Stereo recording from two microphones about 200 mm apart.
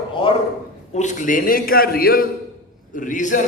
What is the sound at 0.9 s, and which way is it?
A man's voice, 40° left (ahead or behind).